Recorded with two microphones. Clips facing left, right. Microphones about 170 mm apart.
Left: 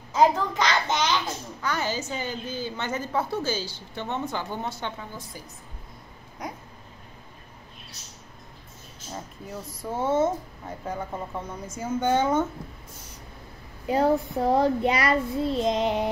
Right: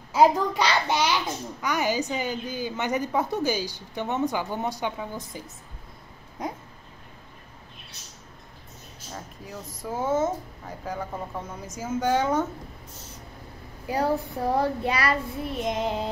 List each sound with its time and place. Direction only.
0.1 s a woman's voice: 10° right (ahead or behind)
6.4 s a sound: 25° right (ahead or behind)
9.8 s a woman's voice: centre (ahead or behind)
13.8 s a child's voice: 25° left (ahead or behind)